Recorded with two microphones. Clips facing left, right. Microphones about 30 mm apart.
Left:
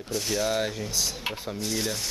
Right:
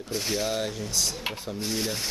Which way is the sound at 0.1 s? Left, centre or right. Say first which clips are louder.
Even; centre.